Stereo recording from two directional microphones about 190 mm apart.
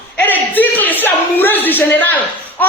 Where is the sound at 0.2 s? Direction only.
10° left (ahead or behind).